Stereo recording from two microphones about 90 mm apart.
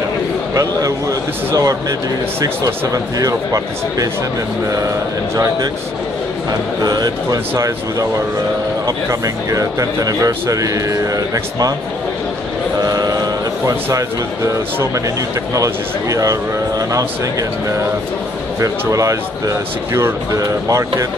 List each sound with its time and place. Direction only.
0.6 s speech: 35° right (ahead or behind)
5.3 s speech: 40° right (ahead or behind)
6.8 s speech: 45° right (ahead or behind)
12.8 s a sound: 45° right (ahead or behind)
13.9 s speech: 35° right (ahead or behind)